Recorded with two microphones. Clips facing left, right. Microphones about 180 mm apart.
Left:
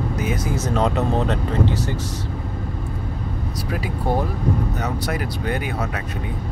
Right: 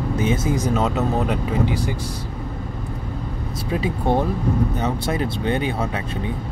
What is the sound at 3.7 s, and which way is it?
Speech, 25° right (ahead or behind).